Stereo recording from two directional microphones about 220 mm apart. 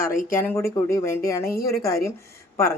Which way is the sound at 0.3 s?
10° left (ahead or behind).